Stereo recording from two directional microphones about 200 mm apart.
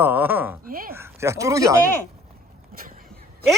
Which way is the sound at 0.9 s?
15° right (ahead or behind).